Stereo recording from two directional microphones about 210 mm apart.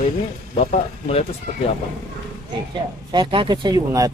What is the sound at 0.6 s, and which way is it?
Speech, 30° left (ahead or behind).